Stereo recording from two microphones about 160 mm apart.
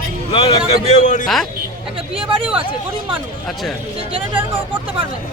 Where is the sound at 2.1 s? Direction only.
35° right (ahead or behind).